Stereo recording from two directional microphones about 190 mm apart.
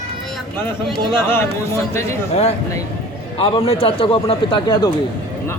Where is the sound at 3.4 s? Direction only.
30° left (ahead or behind).